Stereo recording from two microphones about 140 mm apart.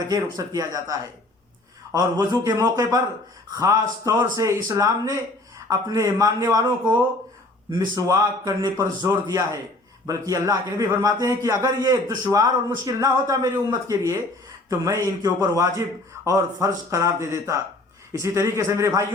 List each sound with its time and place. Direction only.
0.1 s a man's voice: 25° right (ahead or behind)
7.7 s a man's voice: 25° right (ahead or behind)